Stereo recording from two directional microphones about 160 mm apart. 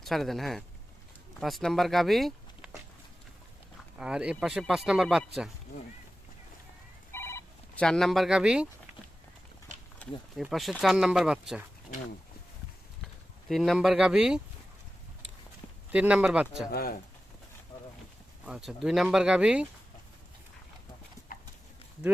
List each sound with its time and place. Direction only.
0.0 s speech: centre (ahead or behind)
3.9 s speech: 5° right (ahead or behind)
7.1 s telephone: 15° left (ahead or behind)
7.9 s speech: centre (ahead or behind)
10.4 s speech: centre (ahead or behind)
13.5 s speech: centre (ahead or behind)
15.9 s speech: 5° right (ahead or behind)
16.7 s speech: 65° left (ahead or behind)
18.4 s speech: 5° right (ahead or behind)